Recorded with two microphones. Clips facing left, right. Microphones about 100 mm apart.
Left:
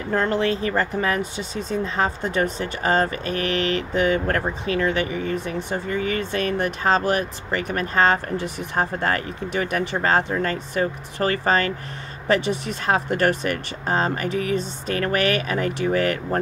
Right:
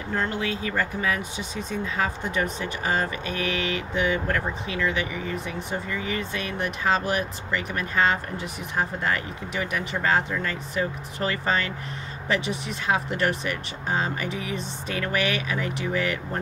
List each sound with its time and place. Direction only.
0.3 s speech: 40° left (ahead or behind)
12.9 s speech: 45° left (ahead or behind)